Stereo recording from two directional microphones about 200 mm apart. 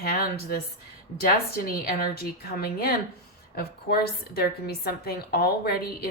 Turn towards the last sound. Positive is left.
turn(degrees=50)  # may be behind; listen again after turning